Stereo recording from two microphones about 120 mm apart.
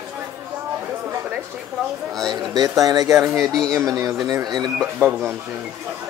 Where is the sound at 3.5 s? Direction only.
5° left (ahead or behind).